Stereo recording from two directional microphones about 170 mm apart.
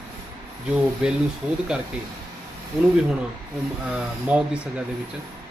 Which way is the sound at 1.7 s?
5° right (ahead or behind).